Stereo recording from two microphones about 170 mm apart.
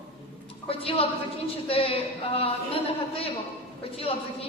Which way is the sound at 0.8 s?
35° left (ahead or behind).